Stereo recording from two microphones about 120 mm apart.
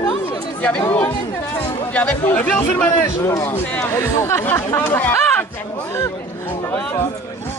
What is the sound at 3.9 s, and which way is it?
Speech, 25° left (ahead or behind).